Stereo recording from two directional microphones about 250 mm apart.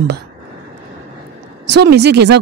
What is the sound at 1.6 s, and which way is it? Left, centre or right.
Speech, right.